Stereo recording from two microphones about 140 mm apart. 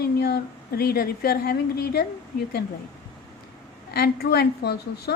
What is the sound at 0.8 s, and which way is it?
A woman's voice, 90° left.